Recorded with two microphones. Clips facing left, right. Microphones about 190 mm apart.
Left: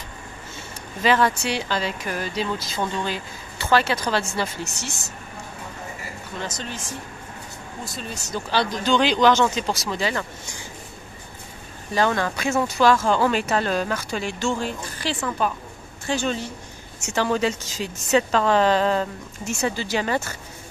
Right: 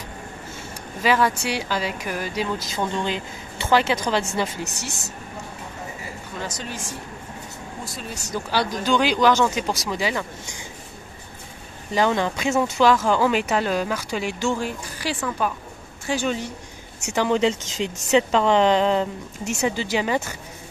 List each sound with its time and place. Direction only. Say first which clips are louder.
1.0 s speech: left 1 dB; 10° right (ahead or behind)
6.4 s speech: even; 10° right (ahead or behind)
8.3 s speech: even; 10° right (ahead or behind)
11.9 s speech: right 1 dB; 15° right (ahead or behind)
15.2 s a woman's voice: left 1 dB; centre (ahead or behind)
16.1 s a woman's voice: even; 15° right (ahead or behind)